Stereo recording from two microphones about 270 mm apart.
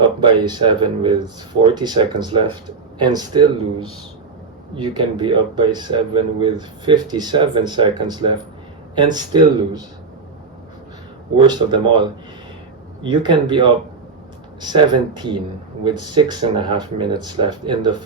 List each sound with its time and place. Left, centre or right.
0.0 s speech: centre
11.4 s speech: centre